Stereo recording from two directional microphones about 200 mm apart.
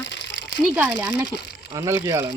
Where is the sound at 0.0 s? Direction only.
65° left (ahead or behind).